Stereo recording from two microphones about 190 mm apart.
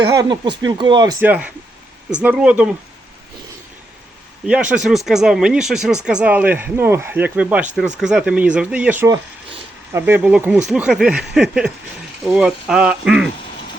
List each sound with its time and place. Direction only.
0.1 s speech: 20° right (ahead or behind)
1.2 s speech: 10° right (ahead or behind)
4.4 s speech: 5° right (ahead or behind)